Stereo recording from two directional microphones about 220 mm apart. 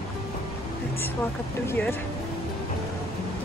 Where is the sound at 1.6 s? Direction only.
5° left (ahead or behind).